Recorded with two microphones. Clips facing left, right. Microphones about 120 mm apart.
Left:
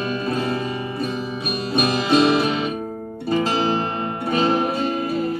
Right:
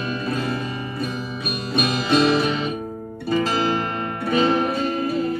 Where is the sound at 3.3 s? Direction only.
30° left (ahead or behind).